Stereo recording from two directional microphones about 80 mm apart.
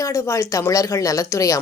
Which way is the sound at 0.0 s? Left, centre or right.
Left.